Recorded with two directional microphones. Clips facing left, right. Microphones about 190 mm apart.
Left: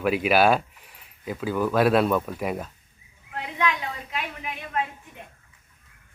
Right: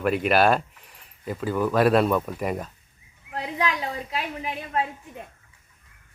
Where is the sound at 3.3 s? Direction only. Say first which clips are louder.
Even; 35° right (ahead or behind).